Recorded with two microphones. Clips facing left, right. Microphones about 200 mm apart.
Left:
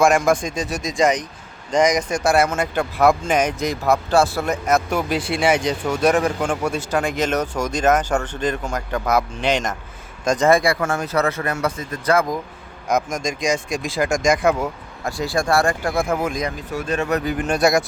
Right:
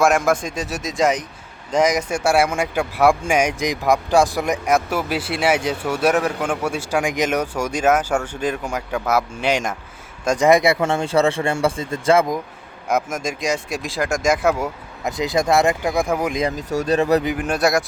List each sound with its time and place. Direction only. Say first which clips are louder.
0.0 s speech: left 1 dB; 5° right (ahead or behind); by 12.4 s 25° right (ahead or behind)
12.9 s speech: even; 5° right (ahead or behind)
15.0 s speech: right 2 dB; 20° right (ahead or behind)
16.6 s speech: right 5 dB; 40° right (ahead or behind)
17.3 s speech: left 1 dB; 5° right (ahead or behind)